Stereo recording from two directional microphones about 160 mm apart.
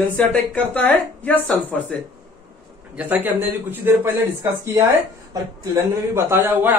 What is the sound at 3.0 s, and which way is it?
Speech, 10° right (ahead or behind).